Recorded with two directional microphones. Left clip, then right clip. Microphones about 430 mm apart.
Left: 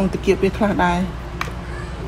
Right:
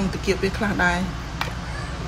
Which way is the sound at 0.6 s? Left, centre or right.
Centre.